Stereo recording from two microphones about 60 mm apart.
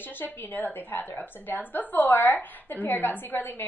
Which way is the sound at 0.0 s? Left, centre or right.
Left.